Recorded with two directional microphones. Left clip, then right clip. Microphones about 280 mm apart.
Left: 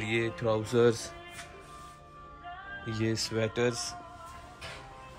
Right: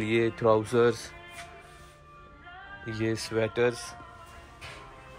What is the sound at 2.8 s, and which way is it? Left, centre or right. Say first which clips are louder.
Speech: right 2 dB; centre.